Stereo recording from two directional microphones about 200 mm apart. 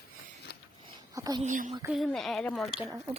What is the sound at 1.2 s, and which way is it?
Speech, 20° right (ahead or behind).